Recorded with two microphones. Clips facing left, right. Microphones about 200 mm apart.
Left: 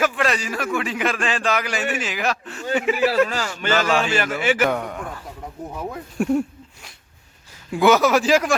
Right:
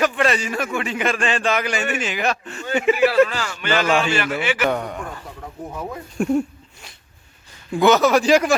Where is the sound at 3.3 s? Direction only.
40° left (ahead or behind).